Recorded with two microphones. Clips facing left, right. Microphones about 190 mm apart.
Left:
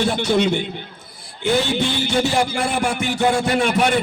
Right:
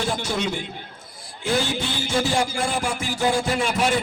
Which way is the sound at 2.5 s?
65° left (ahead or behind).